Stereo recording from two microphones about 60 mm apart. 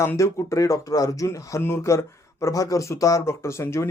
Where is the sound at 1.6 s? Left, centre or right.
Left.